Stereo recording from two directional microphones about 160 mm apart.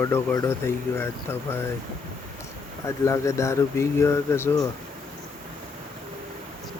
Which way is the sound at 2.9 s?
20° left (ahead or behind).